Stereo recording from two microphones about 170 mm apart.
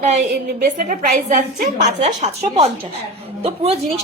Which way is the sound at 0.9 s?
50° right (ahead or behind).